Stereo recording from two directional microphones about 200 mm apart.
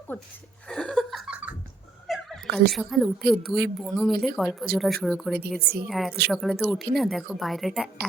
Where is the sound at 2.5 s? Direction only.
55° right (ahead or behind).